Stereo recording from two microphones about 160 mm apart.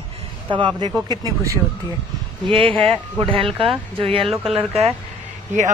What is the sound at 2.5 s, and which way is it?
Speech, 35° right (ahead or behind).